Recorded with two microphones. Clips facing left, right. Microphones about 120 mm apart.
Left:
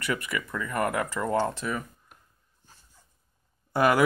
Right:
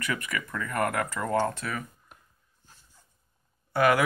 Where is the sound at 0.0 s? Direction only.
25° left (ahead or behind).